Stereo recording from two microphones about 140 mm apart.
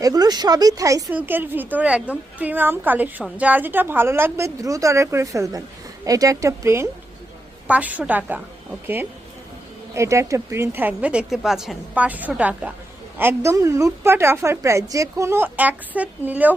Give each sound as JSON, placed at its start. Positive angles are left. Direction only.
{"t": 0.0, "sound": "a woman's voice", "side_deg": -25}
{"t": 9.9, "sound": "a woman's voice", "side_deg": -20}